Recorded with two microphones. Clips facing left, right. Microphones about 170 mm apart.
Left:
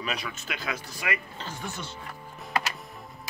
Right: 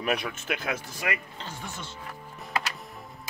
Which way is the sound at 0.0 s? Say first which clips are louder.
Right 5 dB; 55° right (ahead or behind).